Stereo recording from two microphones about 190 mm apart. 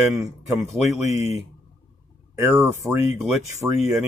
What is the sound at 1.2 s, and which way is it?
Speech, 35° left (ahead or behind).